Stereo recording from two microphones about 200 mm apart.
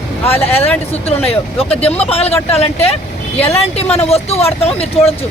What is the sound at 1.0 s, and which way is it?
Speech, 30° left (ahead or behind).